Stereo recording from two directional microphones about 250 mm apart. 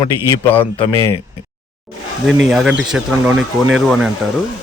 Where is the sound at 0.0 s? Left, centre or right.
Left.